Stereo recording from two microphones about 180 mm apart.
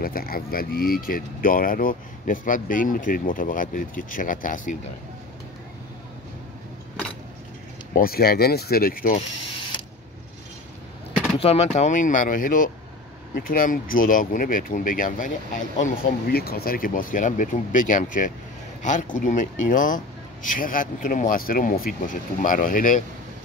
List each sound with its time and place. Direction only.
0.0 s speech: 55° left (ahead or behind)
7.9 s speech: 55° left (ahead or behind)
11.3 s speech: 35° left (ahead or behind)